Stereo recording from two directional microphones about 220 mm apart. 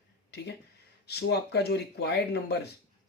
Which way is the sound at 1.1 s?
50° left (ahead or behind).